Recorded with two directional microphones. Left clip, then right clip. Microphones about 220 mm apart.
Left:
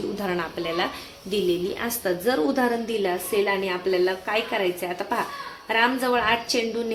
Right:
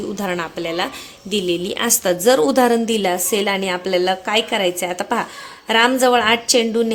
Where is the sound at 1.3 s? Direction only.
40° right (ahead or behind).